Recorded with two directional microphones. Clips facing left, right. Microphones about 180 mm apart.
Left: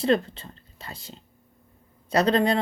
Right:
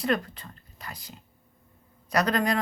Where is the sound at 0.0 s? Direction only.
25° left (ahead or behind).